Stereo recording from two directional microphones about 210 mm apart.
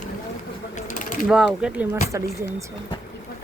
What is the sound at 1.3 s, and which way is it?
Speech, 5° right (ahead or behind).